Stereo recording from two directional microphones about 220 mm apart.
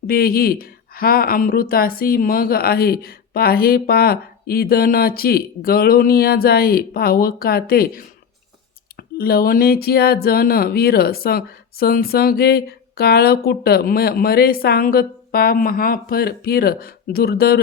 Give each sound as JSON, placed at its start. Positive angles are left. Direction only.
{"t": 0.1, "sound": "speech", "side_deg": 40}